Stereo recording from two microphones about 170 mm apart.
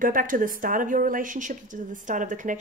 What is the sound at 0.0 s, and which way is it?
Speech, 55° right (ahead or behind).